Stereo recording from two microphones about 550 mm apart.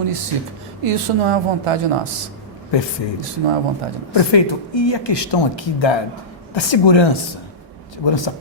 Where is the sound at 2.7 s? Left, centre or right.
Left.